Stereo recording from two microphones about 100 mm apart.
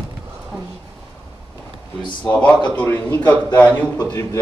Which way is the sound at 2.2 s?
15° left (ahead or behind).